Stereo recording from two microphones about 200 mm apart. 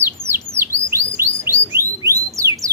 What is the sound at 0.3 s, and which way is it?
Bird, 10° right (ahead or behind).